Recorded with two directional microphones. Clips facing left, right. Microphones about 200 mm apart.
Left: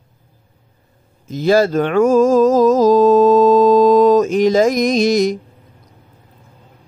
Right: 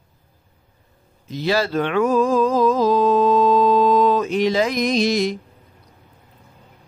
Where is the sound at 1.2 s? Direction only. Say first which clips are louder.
Left 7 dB; 45° left (ahead or behind).